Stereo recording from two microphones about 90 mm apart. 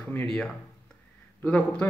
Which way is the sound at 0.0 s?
25° left (ahead or behind).